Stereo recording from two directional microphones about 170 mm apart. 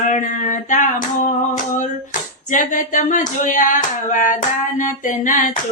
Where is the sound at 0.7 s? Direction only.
50° left (ahead or behind).